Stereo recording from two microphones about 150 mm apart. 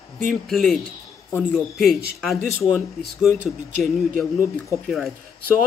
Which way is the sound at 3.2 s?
Centre (ahead or behind).